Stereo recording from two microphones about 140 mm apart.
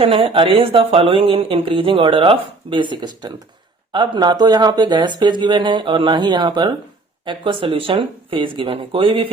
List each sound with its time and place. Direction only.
0.0 s speech: 40° right (ahead or behind)